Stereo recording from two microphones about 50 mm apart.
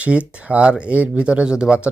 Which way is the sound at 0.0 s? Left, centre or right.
Right.